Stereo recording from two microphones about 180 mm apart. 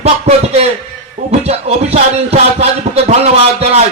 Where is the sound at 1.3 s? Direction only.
35° right (ahead or behind).